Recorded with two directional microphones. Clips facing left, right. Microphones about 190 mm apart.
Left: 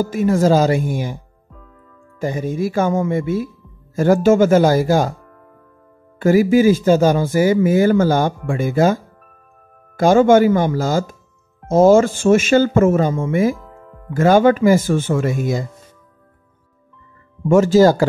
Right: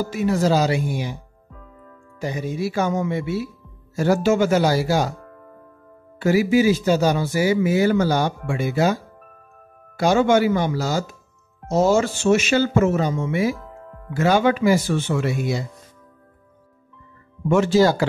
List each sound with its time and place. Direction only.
0.0 s speech: 45° left (ahead or behind)
2.1 s speech: 50° left (ahead or behind)
6.1 s speech: 50° left (ahead or behind)
17.5 s speech: 45° left (ahead or behind)